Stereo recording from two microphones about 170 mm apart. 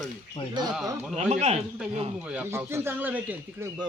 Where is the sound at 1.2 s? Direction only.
40° right (ahead or behind).